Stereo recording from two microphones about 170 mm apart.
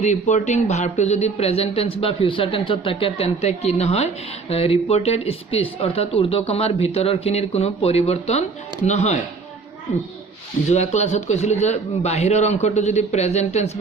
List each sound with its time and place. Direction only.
0.0 s speech: 45° left (ahead or behind)
10.7 s speech: 40° left (ahead or behind)